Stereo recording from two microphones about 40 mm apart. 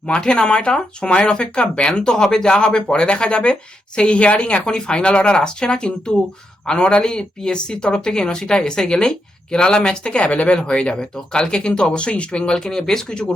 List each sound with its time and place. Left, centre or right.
0.2 s speech: left